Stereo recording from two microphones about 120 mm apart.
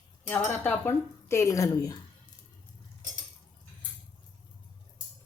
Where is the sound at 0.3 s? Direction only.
15° left (ahead or behind); by 2.0 s 30° left (ahead or behind).